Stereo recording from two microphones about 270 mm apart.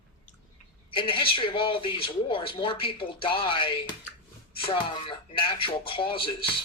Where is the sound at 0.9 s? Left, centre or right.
Centre.